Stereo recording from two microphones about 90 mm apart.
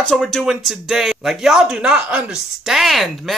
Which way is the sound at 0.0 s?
5° left (ahead or behind).